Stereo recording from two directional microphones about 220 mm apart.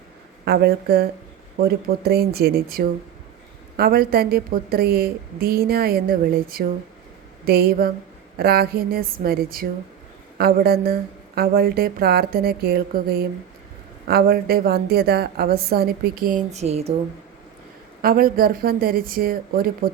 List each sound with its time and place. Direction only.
0.4 s a woman's voice: 45° right (ahead or behind); by 16.9 s 30° right (ahead or behind)
18.0 s a woman's voice: 40° right (ahead or behind)